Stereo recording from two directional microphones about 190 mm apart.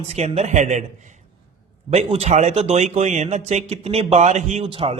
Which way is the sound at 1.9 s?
35° right (ahead or behind).